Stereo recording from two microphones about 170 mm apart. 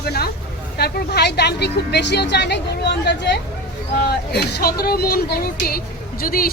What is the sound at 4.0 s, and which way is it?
Speech, 70° left (ahead or behind).